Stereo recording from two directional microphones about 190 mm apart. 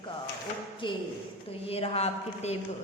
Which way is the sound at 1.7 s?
30° left (ahead or behind).